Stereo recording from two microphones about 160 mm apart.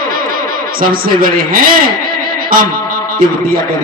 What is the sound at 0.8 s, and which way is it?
A man's voice, 65° right (ahead or behind).